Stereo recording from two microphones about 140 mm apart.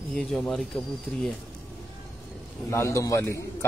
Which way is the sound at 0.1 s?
5° left (ahead or behind).